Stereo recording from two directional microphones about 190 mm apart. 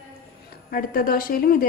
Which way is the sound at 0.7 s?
50° left (ahead or behind).